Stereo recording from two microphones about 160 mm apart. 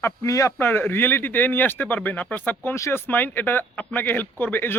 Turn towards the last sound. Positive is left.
turn(degrees=15)  # may be behind; listen again after turning